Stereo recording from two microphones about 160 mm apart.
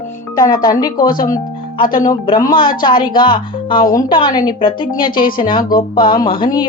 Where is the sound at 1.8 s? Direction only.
60° left (ahead or behind).